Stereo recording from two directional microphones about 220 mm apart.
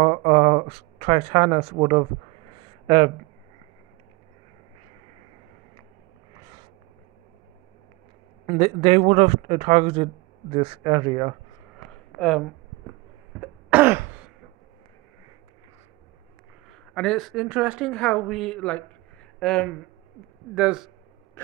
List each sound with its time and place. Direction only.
0.0 s speech: 25° right (ahead or behind)
2.5 s a sound: 20° right (ahead or behind)
8.5 s speech: 25° right (ahead or behind)
11.9 s a sound: centre (ahead or behind)
13.4 s throat clearing: 5° right (ahead or behind)
16.9 s speech: centre (ahead or behind)